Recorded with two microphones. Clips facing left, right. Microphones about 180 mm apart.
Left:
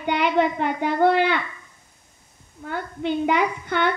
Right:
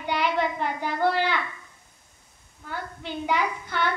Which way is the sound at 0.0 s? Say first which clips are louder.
Left 5 dB; 55° left (ahead or behind).